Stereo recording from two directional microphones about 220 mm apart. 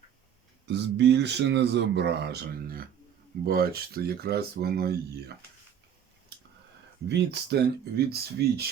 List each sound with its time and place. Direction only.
0.7 s speech: 50° right (ahead or behind)
7.1 s speech: 50° right (ahead or behind)